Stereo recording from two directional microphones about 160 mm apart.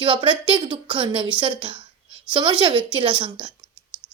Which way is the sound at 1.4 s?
30° right (ahead or behind).